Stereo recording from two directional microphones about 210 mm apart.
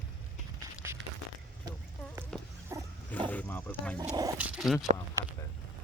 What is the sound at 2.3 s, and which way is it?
Dog, 5° left (ahead or behind).